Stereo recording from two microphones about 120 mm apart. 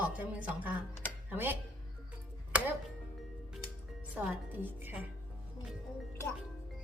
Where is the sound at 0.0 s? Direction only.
15° right (ahead or behind).